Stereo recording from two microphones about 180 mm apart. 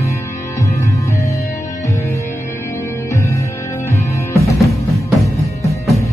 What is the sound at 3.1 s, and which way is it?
Music, 15° left (ahead or behind).